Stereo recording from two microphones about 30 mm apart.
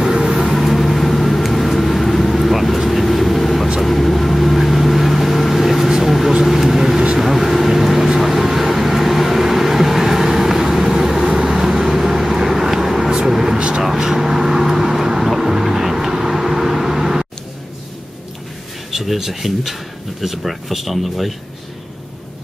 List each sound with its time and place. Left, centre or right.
0.3 s vehicle: centre
0.6 s vehicle: centre
13.1 s a sound: centre
13.6 s vehicle: right
13.9 s vehicle: centre
18.9 s speech: centre